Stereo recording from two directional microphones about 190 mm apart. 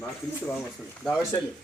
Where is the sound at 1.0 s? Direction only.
5° left (ahead or behind).